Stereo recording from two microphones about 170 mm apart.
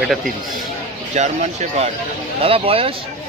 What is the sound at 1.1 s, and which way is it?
Speech, 40° right (ahead or behind).